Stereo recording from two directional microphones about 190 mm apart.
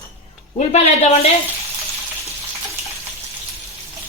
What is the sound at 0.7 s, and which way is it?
Speech, 35° left (ahead or behind).